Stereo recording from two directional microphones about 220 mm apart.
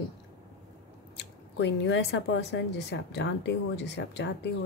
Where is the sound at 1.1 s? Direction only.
55° left (ahead or behind).